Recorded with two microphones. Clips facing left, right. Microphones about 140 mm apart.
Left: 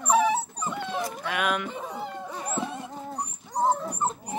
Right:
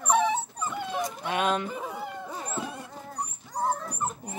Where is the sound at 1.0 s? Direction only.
25° right (ahead or behind).